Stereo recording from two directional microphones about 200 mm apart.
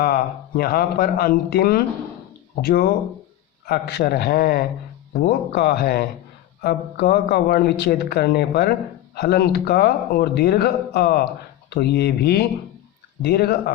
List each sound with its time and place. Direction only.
0.0 s speech: 50° left (ahead or behind)